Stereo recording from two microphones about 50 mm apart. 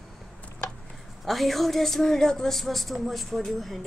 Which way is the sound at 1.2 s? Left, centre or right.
Centre.